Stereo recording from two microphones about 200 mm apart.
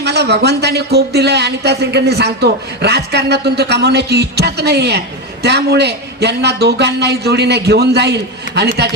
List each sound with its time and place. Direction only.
0.0 s speech: 55° right (ahead or behind)